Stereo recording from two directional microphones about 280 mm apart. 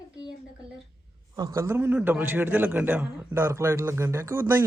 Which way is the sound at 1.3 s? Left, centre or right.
Centre.